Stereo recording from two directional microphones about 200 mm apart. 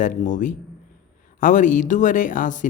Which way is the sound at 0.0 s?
40° left (ahead or behind).